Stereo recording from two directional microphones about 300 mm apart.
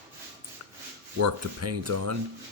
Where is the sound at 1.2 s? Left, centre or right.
Right.